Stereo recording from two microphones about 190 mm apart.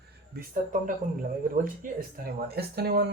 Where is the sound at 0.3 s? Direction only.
45° right (ahead or behind).